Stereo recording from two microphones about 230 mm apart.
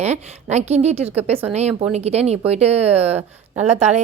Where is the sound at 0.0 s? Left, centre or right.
Right.